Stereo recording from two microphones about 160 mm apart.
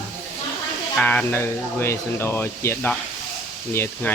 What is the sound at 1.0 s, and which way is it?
Speech, 10° left (ahead or behind).